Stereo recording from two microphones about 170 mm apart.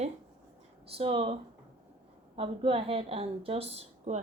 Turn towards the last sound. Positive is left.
turn(degrees=-40)  # may be behind; listen again after turning